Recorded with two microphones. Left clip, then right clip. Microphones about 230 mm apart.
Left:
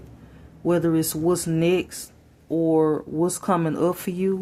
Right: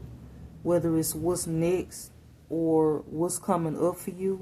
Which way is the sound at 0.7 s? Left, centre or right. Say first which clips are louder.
Left 4 dB; left.